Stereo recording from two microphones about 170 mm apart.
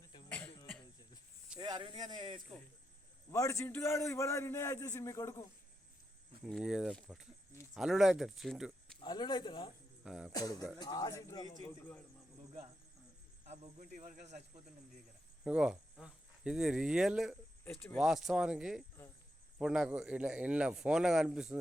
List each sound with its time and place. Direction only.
0.0 s cough: 25° left (ahead or behind)
0.3 s cough: 10° left (ahead or behind)
1.5 s speech: 25° right (ahead or behind)
3.3 s a man's voice: 20° left (ahead or behind)
6.4 s speech: 5° right (ahead or behind)
9.0 s speech: 25° left (ahead or behind)
10.0 s speech: 5° right (ahead or behind)
10.3 s speech: 20° left (ahead or behind)
13.4 s speech: 45° right (ahead or behind)
15.4 s speech: 5° right (ahead or behind)